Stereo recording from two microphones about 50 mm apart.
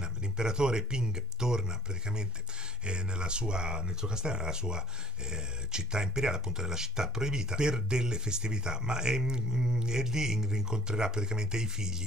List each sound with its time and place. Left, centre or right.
0.0 s speech: centre